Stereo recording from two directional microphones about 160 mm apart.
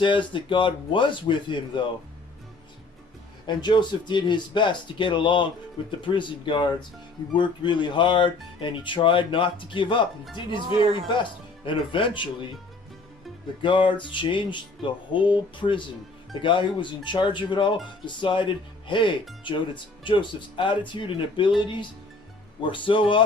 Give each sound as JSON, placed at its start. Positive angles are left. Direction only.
{"t": 0.0, "sound": "speech", "side_deg": 30}
{"t": 3.4, "sound": "speech", "side_deg": 30}
{"t": 13.6, "sound": "speech", "side_deg": 30}